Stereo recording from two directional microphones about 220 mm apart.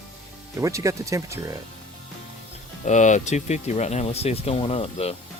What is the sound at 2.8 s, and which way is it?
Speech, 35° left (ahead or behind).